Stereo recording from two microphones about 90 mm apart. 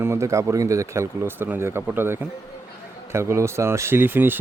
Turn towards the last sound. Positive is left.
turn(degrees=-20)  # may be behind; listen again after turning